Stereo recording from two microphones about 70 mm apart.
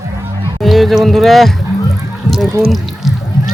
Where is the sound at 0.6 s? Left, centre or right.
Centre.